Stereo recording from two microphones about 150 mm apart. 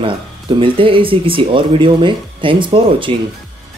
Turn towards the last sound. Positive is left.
turn(degrees=-35)  # may be behind; listen again after turning